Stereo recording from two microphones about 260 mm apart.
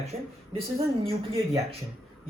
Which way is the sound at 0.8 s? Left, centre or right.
Right.